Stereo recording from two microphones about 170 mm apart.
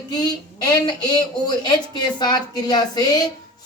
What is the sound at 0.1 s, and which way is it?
A woman's voice, 25° left (ahead or behind).